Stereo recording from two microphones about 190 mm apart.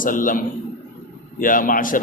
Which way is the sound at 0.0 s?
45° left (ahead or behind).